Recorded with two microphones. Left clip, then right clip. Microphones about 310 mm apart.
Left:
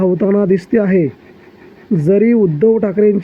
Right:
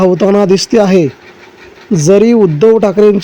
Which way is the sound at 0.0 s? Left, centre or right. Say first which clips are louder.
Right 5 dB; centre.